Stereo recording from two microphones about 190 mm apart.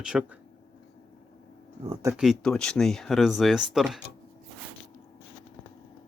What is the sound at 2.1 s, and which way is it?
Speech, centre (ahead or behind).